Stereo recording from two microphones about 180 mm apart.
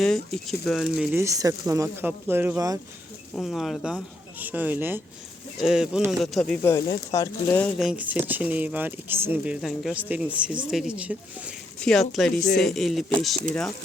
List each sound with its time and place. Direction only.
0.0 s speech: centre (ahead or behind)
1.2 s speech: 20° right (ahead or behind)
3.3 s speech: centre (ahead or behind)
6.6 s speech: 15° left (ahead or behind)
7.8 s speech: 5° right (ahead or behind)